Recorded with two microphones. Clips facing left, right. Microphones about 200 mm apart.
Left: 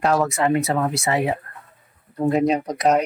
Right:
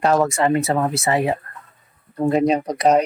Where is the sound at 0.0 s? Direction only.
Centre (ahead or behind).